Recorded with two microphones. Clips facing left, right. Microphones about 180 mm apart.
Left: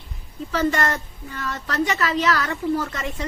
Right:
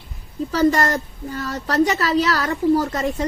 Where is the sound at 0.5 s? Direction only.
35° right (ahead or behind).